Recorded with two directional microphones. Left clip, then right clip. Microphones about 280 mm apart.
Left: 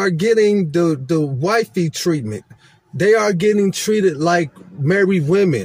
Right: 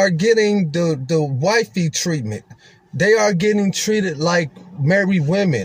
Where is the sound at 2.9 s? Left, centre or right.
Centre.